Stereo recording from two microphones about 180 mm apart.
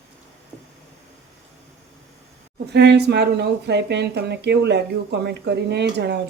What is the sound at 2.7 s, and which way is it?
Speech, 70° right (ahead or behind).